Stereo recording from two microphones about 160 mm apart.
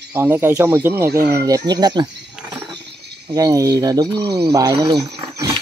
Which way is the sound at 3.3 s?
20° right (ahead or behind).